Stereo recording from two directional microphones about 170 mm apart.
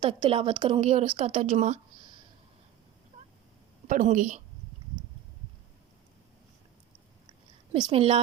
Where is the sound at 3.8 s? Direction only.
50° right (ahead or behind).